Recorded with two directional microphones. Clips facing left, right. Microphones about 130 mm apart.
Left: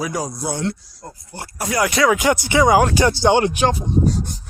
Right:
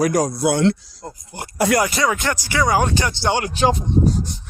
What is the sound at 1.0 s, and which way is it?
Speech, 20° right (ahead or behind).